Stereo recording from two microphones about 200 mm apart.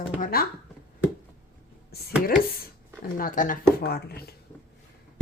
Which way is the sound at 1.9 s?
50° left (ahead or behind).